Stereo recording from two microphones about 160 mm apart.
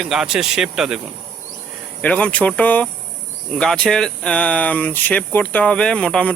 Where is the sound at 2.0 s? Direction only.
10° left (ahead or behind).